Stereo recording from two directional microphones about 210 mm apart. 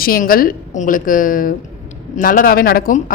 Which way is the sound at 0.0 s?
45° left (ahead or behind).